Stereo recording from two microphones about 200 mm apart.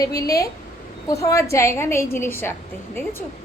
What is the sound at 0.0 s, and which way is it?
A woman's voice, 20° left (ahead or behind).